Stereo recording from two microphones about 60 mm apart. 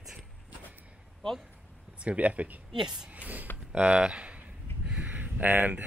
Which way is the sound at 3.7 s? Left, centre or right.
Centre.